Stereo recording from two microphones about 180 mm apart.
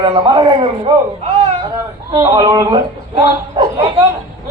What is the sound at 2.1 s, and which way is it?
A man's voice, 20° right (ahead or behind).